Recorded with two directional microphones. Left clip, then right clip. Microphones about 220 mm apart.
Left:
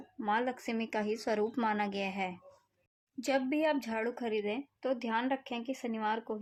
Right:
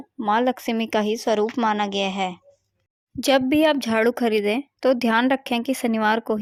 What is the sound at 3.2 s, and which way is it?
A woman's voice, 45° right (ahead or behind).